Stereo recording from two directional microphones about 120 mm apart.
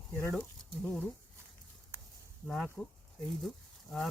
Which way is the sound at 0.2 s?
20° left (ahead or behind).